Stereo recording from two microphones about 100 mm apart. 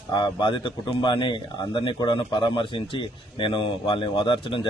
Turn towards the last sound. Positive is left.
turn(degrees=55)  # may be behind; listen again after turning